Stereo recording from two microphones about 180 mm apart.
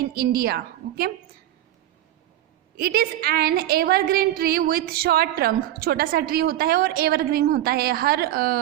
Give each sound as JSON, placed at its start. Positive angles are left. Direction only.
{"t": 0.0, "sound": "a woman's voice", "side_deg": -55}
{"t": 2.7, "sound": "a woman's voice", "side_deg": -55}